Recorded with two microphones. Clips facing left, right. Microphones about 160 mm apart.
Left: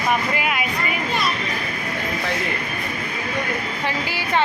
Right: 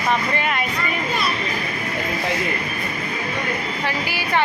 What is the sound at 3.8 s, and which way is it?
Speech, 20° left (ahead or behind).